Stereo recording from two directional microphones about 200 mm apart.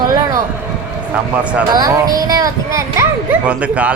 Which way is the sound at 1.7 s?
20° right (ahead or behind).